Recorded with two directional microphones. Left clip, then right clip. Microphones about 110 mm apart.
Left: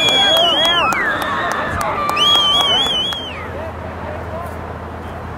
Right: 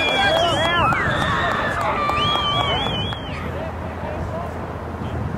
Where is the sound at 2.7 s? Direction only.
50° left (ahead or behind).